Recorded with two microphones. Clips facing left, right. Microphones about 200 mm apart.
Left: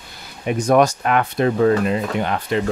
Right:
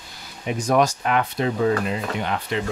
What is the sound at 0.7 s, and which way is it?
Speech, 55° left (ahead or behind).